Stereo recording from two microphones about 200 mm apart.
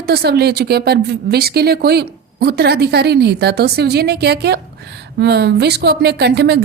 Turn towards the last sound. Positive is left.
turn(degrees=-60)  # may be behind; listen again after turning